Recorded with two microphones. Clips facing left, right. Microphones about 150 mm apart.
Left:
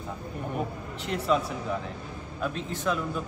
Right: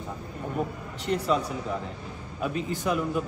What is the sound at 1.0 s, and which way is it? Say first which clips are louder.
Speech: right 1 dB; centre (ahead or behind).